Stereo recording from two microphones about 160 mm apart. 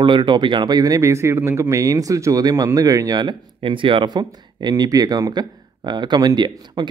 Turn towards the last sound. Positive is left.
turn(degrees=-25)  # may be behind; listen again after turning